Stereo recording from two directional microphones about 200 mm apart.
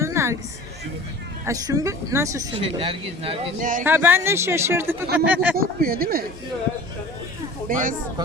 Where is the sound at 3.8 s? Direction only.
10° right (ahead or behind).